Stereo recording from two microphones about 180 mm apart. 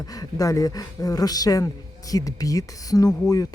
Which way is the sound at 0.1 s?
20° left (ahead or behind).